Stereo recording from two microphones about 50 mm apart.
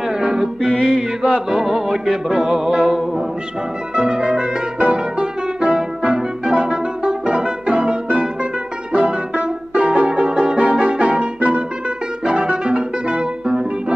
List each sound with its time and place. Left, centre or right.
0.2 s music: centre